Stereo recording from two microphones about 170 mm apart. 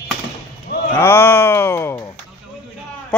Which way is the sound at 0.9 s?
15° left (ahead or behind).